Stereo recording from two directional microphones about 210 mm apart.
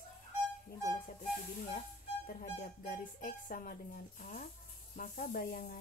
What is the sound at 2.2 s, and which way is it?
Speech, 40° left (ahead or behind).